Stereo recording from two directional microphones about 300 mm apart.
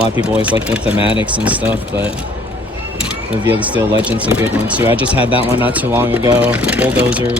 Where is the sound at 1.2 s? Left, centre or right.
Centre.